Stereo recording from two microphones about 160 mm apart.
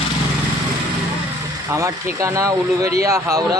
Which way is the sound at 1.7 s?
20° right (ahead or behind).